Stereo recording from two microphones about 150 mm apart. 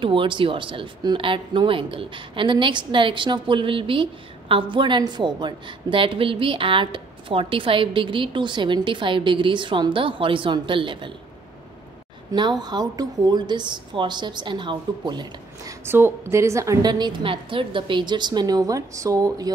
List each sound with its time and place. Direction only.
0.0 s speech: 35° right (ahead or behind)
12.3 s a woman's voice: 30° right (ahead or behind)
15.8 s a woman's voice: 15° right (ahead or behind)